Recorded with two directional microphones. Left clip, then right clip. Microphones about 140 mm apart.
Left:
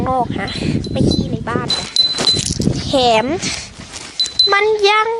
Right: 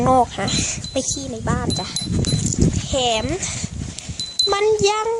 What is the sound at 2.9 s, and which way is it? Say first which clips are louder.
Speech: left 8 dB; 45° left (ahead or behind).